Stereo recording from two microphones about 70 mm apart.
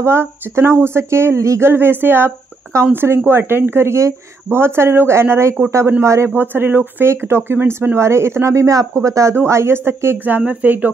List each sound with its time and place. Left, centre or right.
0.0 s speech: right